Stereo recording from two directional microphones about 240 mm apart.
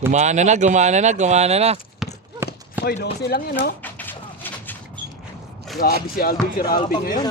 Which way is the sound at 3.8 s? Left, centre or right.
Centre.